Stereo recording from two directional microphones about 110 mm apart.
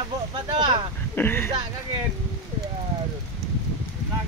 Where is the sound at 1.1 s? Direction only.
20° left (ahead or behind).